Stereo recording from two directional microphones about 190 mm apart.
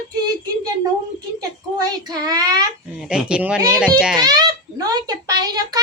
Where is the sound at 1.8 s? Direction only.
20° right (ahead or behind).